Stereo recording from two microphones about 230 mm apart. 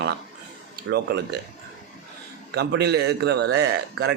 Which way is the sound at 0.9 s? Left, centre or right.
Right.